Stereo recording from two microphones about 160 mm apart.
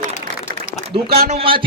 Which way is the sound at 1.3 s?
40° right (ahead or behind).